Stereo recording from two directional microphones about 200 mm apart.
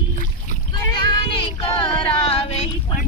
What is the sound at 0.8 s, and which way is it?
Child singing, 20° left (ahead or behind).